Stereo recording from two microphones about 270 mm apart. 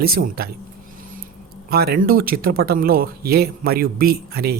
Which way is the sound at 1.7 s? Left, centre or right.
Right.